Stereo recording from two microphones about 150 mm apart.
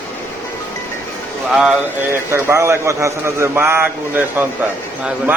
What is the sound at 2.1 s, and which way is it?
A man's voice, 15° right (ahead or behind).